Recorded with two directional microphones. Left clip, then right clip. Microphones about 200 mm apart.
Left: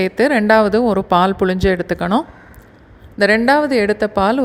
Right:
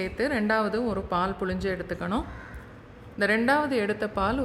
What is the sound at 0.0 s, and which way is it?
A woman's voice, 35° left (ahead or behind).